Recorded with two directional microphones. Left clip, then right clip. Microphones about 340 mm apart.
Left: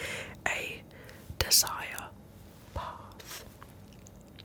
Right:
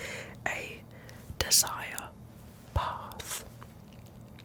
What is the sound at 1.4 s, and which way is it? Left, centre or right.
Speech, centre.